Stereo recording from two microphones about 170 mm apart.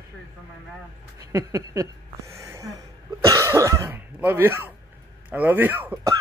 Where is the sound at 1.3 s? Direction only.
20° right (ahead or behind).